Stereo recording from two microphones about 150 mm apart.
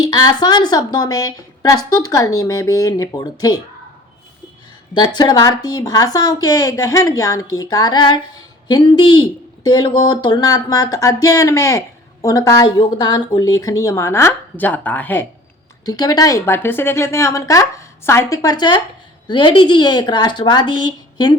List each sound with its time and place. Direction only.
0.0 s a woman's voice: 30° left (ahead or behind)
4.9 s a woman's voice: 30° left (ahead or behind); by 15.3 s 10° left (ahead or behind)
15.9 s a woman's voice: 25° left (ahead or behind)